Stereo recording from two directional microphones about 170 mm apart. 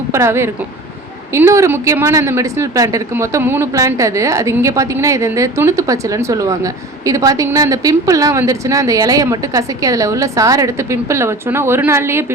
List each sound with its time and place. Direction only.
0.1 s speech: 15° right (ahead or behind)